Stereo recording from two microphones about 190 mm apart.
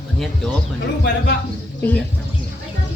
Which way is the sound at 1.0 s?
60° left (ahead or behind).